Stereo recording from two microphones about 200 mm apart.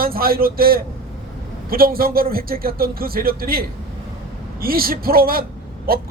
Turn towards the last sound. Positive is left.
turn(degrees=-45)  # may be behind; listen again after turning